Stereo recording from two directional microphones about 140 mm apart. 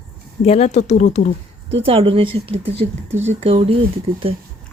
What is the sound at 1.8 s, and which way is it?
A woman's voice, 40° right (ahead or behind).